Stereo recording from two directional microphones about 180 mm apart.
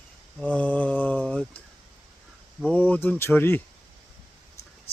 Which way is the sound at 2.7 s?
10° left (ahead or behind).